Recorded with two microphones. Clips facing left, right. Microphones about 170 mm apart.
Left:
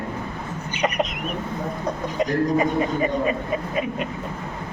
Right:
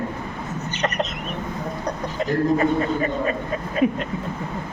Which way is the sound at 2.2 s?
15° left (ahead or behind).